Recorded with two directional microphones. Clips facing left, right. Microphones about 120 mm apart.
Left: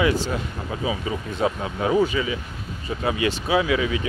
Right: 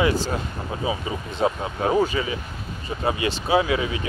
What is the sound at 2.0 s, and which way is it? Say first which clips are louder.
Speech: left 1 dB; 40° right (ahead or behind).